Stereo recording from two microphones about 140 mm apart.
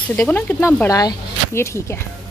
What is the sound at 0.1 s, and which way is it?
Speech, 10° left (ahead or behind).